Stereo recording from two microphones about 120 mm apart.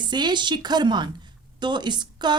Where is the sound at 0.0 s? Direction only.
40° right (ahead or behind).